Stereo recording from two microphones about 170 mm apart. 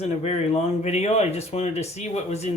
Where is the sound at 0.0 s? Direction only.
40° left (ahead or behind).